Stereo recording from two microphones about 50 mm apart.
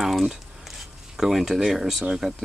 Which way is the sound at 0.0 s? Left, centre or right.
Centre.